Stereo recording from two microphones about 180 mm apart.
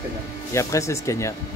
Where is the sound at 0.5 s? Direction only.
15° left (ahead or behind).